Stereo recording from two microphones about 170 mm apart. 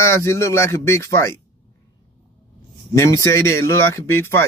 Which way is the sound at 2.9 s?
15° left (ahead or behind).